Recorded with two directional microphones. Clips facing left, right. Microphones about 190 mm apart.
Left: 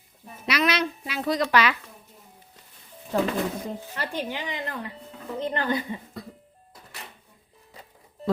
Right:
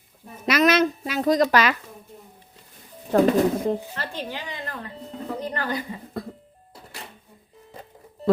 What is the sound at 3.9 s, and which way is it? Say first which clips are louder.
Speech: left 1 dB; 15° left (ahead or behind).